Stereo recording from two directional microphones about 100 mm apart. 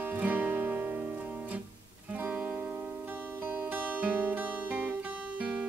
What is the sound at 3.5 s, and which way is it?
Music, 20° right (ahead or behind).